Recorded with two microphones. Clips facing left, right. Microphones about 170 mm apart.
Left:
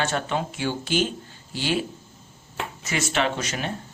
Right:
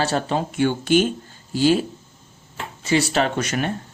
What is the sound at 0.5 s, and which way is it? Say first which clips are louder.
Speech: right 8 dB; 55° right (ahead or behind).